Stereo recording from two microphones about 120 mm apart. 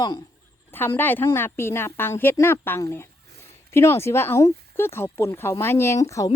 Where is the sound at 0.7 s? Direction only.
20° left (ahead or behind).